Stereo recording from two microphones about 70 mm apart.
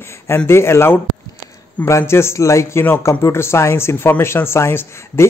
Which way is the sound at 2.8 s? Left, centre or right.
Left.